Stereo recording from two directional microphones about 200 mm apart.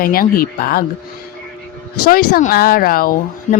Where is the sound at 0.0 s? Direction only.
45° left (ahead or behind).